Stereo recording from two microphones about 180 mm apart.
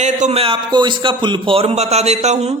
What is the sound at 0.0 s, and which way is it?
A man's voice, 40° right (ahead or behind).